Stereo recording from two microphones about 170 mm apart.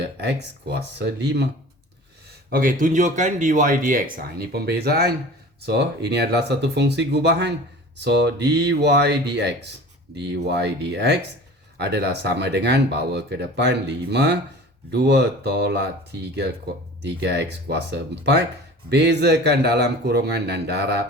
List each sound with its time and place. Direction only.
0.2 s speech: 80° right
2.5 s a man's voice: 55° right (ahead or behind); by 21.0 s 75° right (ahead or behind)